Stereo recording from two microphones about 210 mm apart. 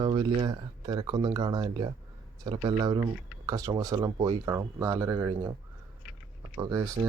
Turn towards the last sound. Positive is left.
turn(degrees=-15)  # may be behind; listen again after turning